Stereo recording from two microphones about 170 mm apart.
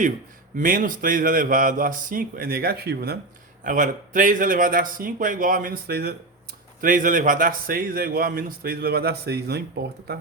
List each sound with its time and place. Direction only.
0.5 s speech: 55° right (ahead or behind)
3.6 s speech: 50° right (ahead or behind)
6.8 s a man's voice: 50° right (ahead or behind); by 10.2 s 70° right (ahead or behind)